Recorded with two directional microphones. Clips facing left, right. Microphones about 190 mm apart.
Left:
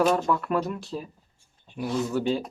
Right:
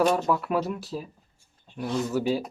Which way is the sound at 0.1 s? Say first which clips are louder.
Even; 5° right (ahead or behind).